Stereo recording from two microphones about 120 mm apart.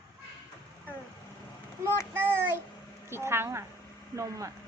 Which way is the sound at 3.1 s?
20° right (ahead or behind).